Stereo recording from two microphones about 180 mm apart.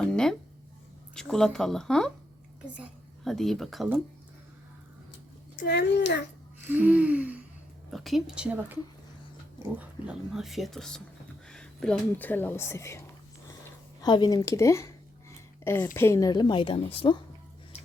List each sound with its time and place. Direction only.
0.0 s a sound: 5° left (ahead or behind)
1.1 s speech: 5° left (ahead or behind)
5.5 s a child's voice: 70° left (ahead or behind)
6.7 s gasp: 10° right (ahead or behind)
7.9 s speech: centre (ahead or behind); by 13.1 s 15° left (ahead or behind)
14.0 s a sound: 25° left (ahead or behind)
16.0 s a woman's voice: 15° left (ahead or behind); by 17.2 s 30° left (ahead or behind)